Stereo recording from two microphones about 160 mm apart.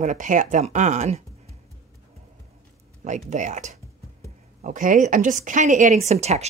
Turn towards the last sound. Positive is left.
turn(degrees=-45)  # may be behind; listen again after turning